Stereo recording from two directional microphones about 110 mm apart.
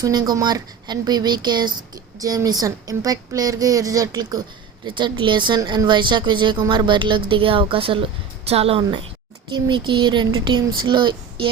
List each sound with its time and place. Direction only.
0.0 s a woman's voice: 35° right (ahead or behind); by 8.8 s 65° right (ahead or behind)
9.5 s a woman's voice: 45° right (ahead or behind)